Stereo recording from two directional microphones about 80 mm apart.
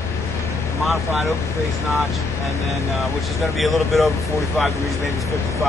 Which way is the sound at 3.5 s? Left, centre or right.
Centre.